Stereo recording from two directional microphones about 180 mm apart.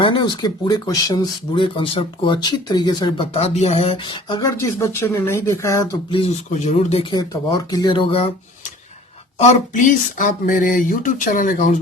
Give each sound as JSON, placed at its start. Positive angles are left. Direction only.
{"t": 0.0, "sound": "speech", "side_deg": 25}
{"t": 6.1, "sound": "speech", "side_deg": 30}
{"t": 6.5, "sound": "speech", "side_deg": 40}
{"t": 9.4, "sound": "a sound", "side_deg": 40}